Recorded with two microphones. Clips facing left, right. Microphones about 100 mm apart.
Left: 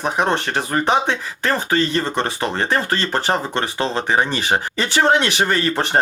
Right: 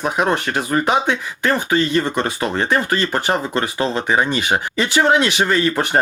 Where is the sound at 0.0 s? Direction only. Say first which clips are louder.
Right 1 dB; 30° left (ahead or behind).